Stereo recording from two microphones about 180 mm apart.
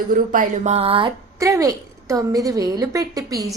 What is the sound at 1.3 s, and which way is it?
A woman's voice, 20° right (ahead or behind).